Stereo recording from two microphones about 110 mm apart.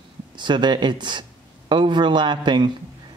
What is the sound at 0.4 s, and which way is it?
A man's voice, 45° right (ahead or behind).